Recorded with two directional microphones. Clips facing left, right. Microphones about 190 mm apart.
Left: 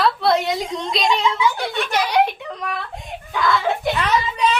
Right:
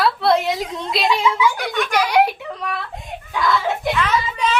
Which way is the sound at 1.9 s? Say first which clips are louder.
Right 2 dB; 10° right (ahead or behind).